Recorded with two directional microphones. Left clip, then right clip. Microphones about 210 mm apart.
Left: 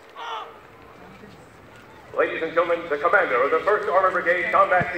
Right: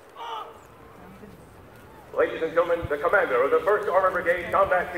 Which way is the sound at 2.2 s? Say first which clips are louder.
Left 1 dB; 40° right (ahead or behind).